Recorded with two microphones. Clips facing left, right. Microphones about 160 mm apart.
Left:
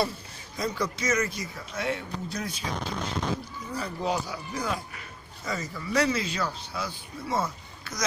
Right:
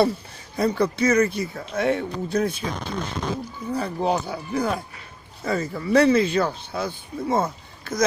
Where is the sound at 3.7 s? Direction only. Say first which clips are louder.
Right 6 dB; 55° right (ahead or behind).